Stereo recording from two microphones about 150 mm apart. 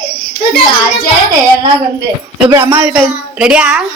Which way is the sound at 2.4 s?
15° right (ahead or behind).